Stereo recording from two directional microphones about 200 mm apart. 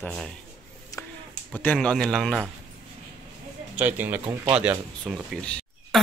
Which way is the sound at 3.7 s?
10° right (ahead or behind).